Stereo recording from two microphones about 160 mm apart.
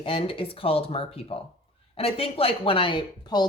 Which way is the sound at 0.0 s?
35° left (ahead or behind).